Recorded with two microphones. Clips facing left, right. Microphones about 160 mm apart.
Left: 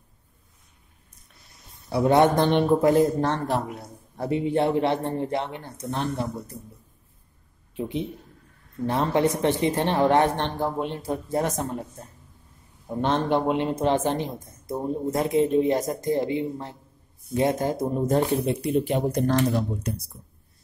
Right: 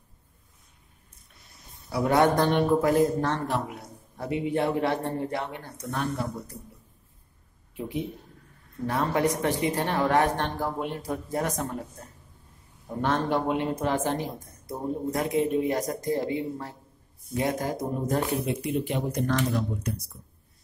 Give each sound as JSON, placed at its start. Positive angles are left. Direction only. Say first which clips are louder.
{"t": 1.9, "sound": "speech", "louder": "left 3 dB", "side_deg": 25}
{"t": 8.8, "sound": "speech", "louder": "left 3 dB", "side_deg": 25}
{"t": 13.0, "sound": "speech", "louder": "left 3 dB", "side_deg": 25}